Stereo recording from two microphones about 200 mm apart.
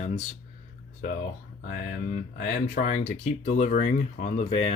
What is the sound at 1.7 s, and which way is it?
Speech, 45° left (ahead or behind).